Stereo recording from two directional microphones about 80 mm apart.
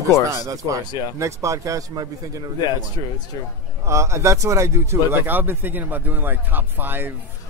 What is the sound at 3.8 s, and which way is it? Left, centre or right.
A man's voice, right.